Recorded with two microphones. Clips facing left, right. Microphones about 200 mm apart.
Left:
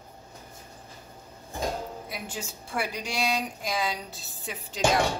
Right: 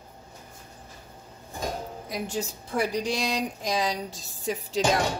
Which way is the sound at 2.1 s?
40° right (ahead or behind).